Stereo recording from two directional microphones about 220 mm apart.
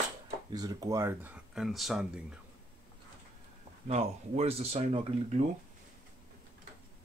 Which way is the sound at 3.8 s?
30° right (ahead or behind).